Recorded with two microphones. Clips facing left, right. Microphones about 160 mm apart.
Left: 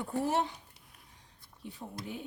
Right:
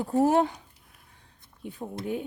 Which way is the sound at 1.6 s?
55° right (ahead or behind).